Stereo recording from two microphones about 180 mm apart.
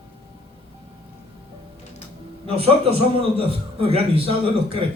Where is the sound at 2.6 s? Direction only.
30° right (ahead or behind).